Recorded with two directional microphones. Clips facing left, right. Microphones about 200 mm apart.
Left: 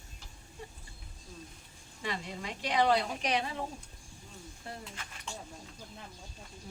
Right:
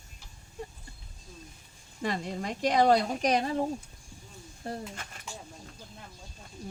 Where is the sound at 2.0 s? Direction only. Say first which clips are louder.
Right 6 dB; 45° right (ahead or behind).